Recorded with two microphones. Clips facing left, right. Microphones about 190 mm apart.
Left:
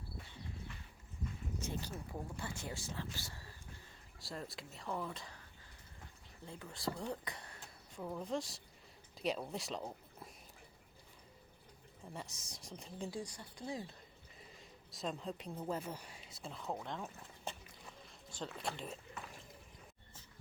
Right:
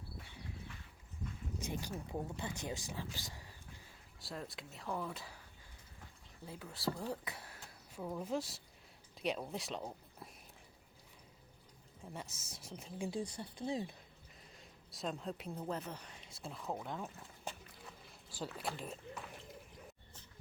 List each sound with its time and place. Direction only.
1.5 s speech: 15° right (ahead or behind)
4.2 s speech: centre (ahead or behind)
6.4 s speech: 5° right (ahead or behind)
12.1 s speech: centre (ahead or behind)
13.1 s speech: 20° right (ahead or behind)
14.4 s speech: centre (ahead or behind)